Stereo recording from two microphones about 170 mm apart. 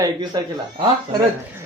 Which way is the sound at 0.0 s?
25° right (ahead or behind).